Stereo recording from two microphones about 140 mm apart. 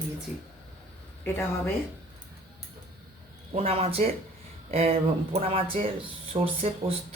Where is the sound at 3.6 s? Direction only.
45° right (ahead or behind).